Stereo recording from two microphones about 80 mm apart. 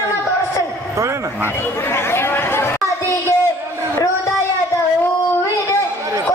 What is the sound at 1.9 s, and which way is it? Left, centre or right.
Chatter, left.